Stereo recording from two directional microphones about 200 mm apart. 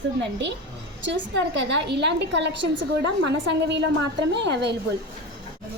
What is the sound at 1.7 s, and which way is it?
A woman's voice, 60° right (ahead or behind).